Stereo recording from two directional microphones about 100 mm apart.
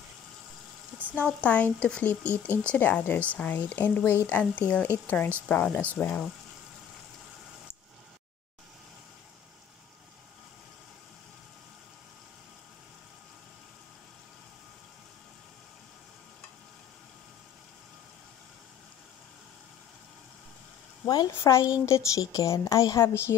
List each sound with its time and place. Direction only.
1.1 s speech: 15° left (ahead or behind)
21.3 s a woman's voice: 25° left (ahead or behind)